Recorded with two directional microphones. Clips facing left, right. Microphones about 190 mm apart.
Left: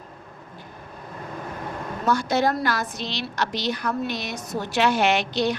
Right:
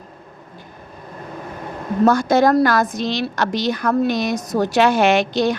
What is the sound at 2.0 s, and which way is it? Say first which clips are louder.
A woman's voice: right 7 dB; 45° right (ahead or behind).